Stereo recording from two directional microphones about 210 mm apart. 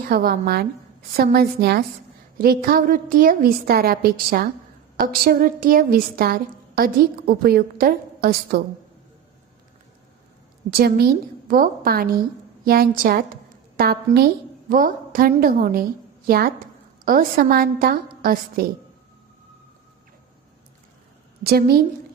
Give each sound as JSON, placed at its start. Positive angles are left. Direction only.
{"t": 0.1, "sound": "a woman's voice", "side_deg": -45}
{"t": 10.7, "sound": "a woman's voice", "side_deg": -50}
{"t": 21.4, "sound": "a woman's voice", "side_deg": -45}